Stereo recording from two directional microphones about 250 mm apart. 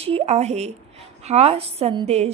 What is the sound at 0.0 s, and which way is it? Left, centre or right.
A woman's voice, right.